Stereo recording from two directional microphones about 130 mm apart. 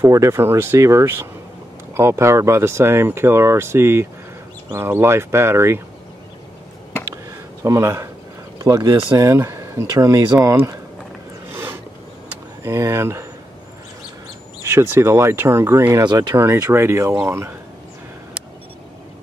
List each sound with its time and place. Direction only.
0.0 s speech: 25° right (ahead or behind)
7.1 s a sound: 25° right (ahead or behind)
8.5 s speech: 25° right (ahead or behind)
10.4 s speech: 15° right (ahead or behind)
11.5 s a sound: 20° right (ahead or behind)
12.6 s speech: 25° right (ahead or behind)
14.6 s speech: 20° right (ahead or behind)